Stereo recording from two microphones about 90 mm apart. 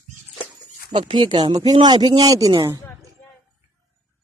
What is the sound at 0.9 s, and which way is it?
Speech, 60° right (ahead or behind).